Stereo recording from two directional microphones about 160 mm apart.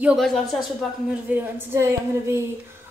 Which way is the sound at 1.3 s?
15° right (ahead or behind).